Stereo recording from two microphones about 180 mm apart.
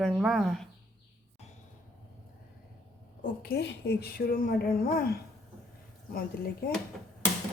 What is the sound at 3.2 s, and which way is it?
A woman's voice, 60° left (ahead or behind).